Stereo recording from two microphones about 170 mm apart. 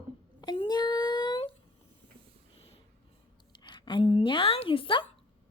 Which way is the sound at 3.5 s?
25° left (ahead or behind).